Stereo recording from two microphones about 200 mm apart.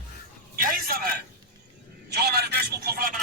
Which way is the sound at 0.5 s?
45° right (ahead or behind).